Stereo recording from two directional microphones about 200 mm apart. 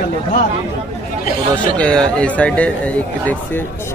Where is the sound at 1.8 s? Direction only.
5° left (ahead or behind).